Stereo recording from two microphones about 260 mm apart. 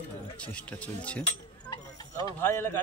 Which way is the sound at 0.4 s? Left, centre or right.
Centre.